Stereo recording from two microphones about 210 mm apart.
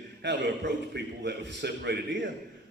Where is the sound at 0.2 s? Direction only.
60° right (ahead or behind).